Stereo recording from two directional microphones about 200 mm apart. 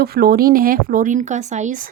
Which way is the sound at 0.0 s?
50° right (ahead or behind).